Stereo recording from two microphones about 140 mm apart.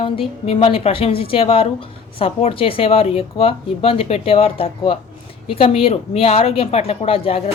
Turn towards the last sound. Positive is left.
turn(degrees=45)  # may be behind; listen again after turning